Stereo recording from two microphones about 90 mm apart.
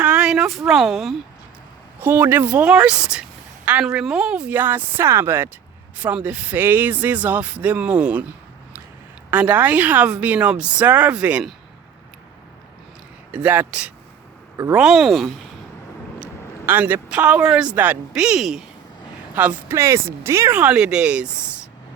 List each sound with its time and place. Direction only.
0.0 s a sound: 10° right (ahead or behind)
2.0 s speech: 20° right (ahead or behind)
9.3 s speech: 15° right (ahead or behind)
13.3 s speech: 15° right (ahead or behind); by 15.3 s centre (ahead or behind)
16.6 s speech: 20° right (ahead or behind); by 18.6 s 5° right (ahead or behind)
19.4 s speech: 20° right (ahead or behind)
19.7 s speech: 30° right (ahead or behind)
20.6 s speech: 10° right (ahead or behind)